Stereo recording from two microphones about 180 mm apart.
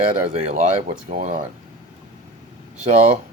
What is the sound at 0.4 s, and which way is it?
Speech, 40° right (ahead or behind).